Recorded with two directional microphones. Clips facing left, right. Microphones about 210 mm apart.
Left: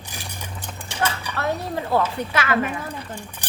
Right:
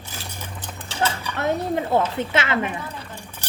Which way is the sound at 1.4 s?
20° right (ahead or behind).